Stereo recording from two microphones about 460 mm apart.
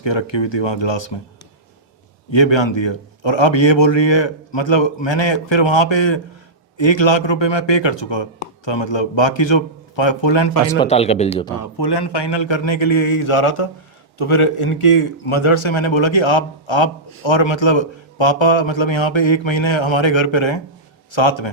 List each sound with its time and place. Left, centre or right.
0.0 s a man's voice: left
2.3 s a man's voice: left
10.8 s speech: centre
11.8 s a man's voice: left